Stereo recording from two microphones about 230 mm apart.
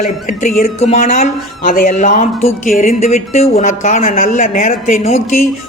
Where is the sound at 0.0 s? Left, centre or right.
Left.